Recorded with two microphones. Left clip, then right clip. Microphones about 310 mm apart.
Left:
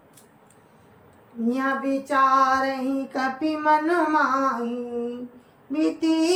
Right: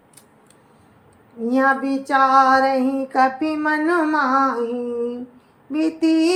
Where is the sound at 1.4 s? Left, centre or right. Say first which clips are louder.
Right 7 dB; centre.